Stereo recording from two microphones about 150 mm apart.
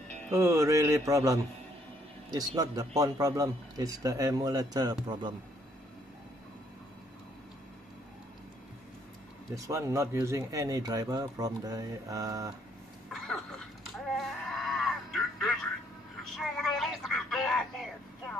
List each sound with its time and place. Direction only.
0.3 s speech: 20° right (ahead or behind)
9.6 s speech: 20° right (ahead or behind)
13.1 s a sound: centre (ahead or behind)